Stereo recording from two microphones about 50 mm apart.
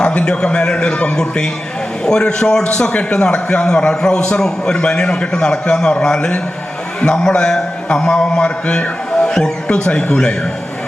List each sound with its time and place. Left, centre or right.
0.0 s a man's voice: left